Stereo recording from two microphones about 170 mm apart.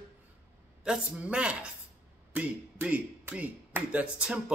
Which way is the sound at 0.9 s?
5° right (ahead or behind).